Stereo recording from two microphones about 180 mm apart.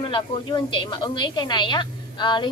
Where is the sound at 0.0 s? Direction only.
25° left (ahead or behind).